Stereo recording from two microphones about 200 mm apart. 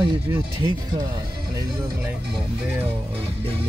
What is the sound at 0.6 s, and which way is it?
Speech, 20° right (ahead or behind).